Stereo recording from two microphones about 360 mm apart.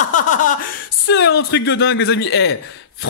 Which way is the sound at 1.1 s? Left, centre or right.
Left.